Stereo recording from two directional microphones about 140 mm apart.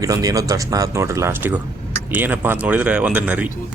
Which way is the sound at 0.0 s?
25° right (ahead or behind).